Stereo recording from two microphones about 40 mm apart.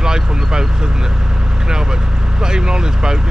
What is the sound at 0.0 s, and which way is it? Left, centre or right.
Speech, centre.